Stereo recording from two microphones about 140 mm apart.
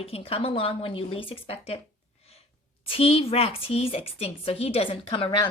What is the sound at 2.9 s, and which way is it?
A woman's voice, 40° left (ahead or behind).